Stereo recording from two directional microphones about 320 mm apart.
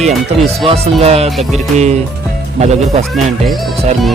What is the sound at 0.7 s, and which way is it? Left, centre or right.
Speech, centre.